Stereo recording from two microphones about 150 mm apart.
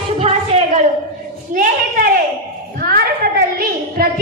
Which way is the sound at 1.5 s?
65° right (ahead or behind).